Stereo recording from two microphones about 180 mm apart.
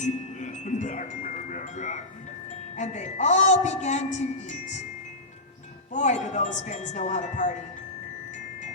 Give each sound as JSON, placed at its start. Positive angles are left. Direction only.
{"t": 0.0, "sound": "wind chime", "side_deg": 40}
{"t": 2.7, "sound": "a woman's voice", "side_deg": 40}
{"t": 5.9, "sound": "speech", "side_deg": 40}